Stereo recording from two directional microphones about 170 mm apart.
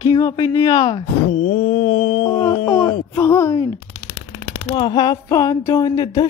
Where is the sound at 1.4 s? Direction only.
40° left (ahead or behind).